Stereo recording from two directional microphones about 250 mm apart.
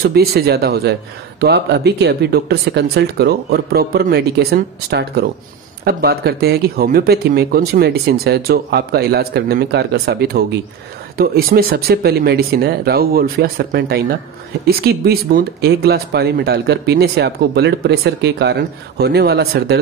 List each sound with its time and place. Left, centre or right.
0.0 s speech: right